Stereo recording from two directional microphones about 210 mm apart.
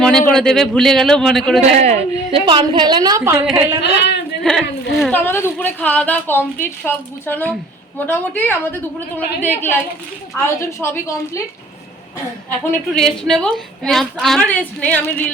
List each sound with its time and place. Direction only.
0.0 s a man's voice: 5° left (ahead or behind)
1.6 s a woman's voice: 30° right (ahead or behind); by 3.4 s 15° right (ahead or behind)
3.8 s speech: 55° left (ahead or behind)
4.4 s speech: centre (ahead or behind)
12.7 s a woman's voice: centre (ahead or behind)